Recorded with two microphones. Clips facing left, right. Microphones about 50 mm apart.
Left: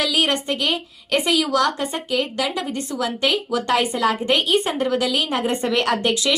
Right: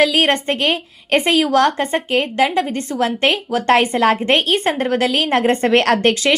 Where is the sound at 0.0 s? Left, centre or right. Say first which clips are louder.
Right 6 dB; right.